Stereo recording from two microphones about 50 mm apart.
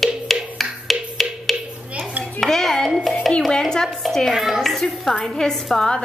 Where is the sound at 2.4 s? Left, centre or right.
Centre.